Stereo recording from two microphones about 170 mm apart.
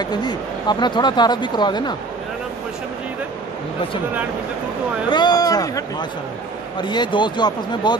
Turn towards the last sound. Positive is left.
turn(degrees=25)  # may be behind; listen again after turning